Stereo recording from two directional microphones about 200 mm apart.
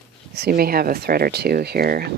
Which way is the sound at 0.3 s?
50° right (ahead or behind).